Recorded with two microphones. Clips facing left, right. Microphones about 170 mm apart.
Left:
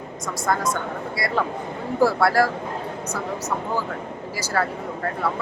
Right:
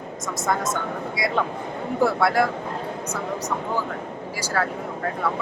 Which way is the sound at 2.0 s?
Centre (ahead or behind).